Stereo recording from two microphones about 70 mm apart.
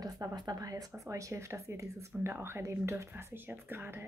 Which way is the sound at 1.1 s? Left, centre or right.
Right.